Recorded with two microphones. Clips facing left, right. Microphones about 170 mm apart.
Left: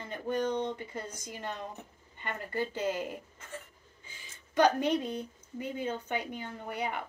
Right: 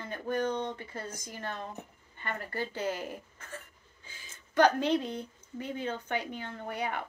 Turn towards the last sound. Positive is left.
turn(degrees=10)  # may be behind; listen again after turning